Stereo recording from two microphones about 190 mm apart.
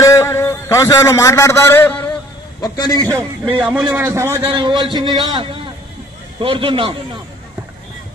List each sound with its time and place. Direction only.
0.0 s a man's voice: 15° left (ahead or behind)
2.6 s a man's voice: 20° left (ahead or behind)
3.2 s a man's voice: 25° right (ahead or behind)
3.9 s a man's voice: 10° right (ahead or behind)